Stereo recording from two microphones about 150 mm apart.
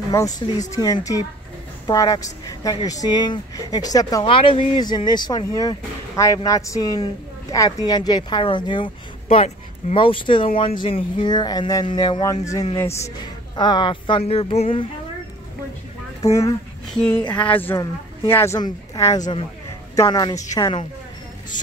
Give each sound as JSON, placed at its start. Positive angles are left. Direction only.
{"t": 0.6, "sound": "speech", "side_deg": 25}
{"t": 16.2, "sound": "speech", "side_deg": 20}
{"t": 17.3, "sound": "speech", "side_deg": 10}